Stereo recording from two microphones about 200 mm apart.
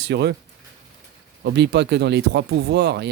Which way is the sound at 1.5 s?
60° right (ahead or behind).